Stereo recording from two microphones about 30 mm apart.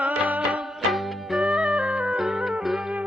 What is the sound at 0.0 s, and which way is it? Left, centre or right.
Music, right.